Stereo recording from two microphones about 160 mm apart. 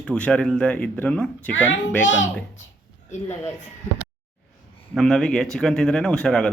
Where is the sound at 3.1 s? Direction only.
45° left (ahead or behind).